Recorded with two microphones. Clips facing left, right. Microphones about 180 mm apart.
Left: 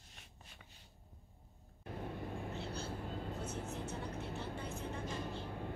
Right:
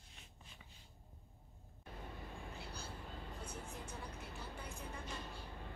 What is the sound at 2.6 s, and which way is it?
Vehicle, 25° left (ahead or behind).